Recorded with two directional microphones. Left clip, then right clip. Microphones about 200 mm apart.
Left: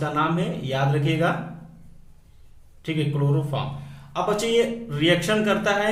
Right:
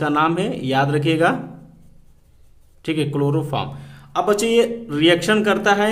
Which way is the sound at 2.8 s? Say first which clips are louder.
Right 6 dB; 35° right (ahead or behind).